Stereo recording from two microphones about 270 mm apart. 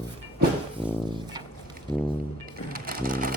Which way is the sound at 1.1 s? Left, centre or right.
Centre.